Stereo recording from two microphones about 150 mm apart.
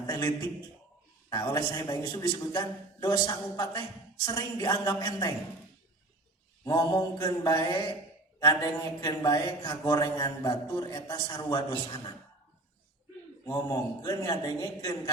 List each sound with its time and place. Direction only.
1.3 s speech: 25° left (ahead or behind)
6.7 s speech: 25° left (ahead or behind)
13.4 s speech: 25° left (ahead or behind)